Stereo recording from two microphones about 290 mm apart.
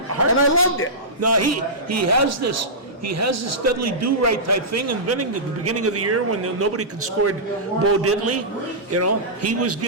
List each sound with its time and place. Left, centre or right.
0.3 s a man's voice: left
1.2 s a man's voice: right